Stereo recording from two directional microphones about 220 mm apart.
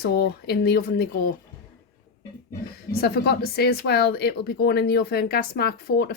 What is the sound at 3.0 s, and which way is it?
Speech, 45° left (ahead or behind).